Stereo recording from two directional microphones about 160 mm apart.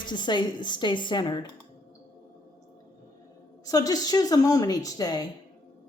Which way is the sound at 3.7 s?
20° left (ahead or behind).